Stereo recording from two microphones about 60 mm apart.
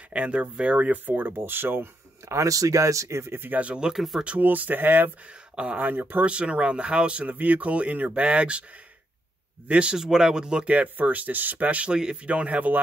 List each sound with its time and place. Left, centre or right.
0.1 s speech: right
2.4 s speech: right
3.6 s speech: centre
3.9 s speech: centre
4.4 s speech: right
5.6 s speech: centre
5.9 s speech: right
9.7 s speech: right
9.9 s speech: centre